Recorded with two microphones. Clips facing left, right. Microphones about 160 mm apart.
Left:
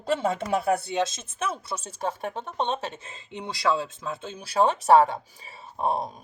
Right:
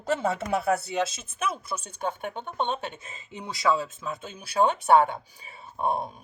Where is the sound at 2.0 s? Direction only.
35° left (ahead or behind).